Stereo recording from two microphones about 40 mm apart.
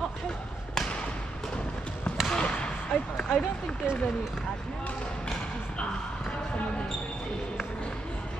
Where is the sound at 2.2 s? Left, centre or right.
Left.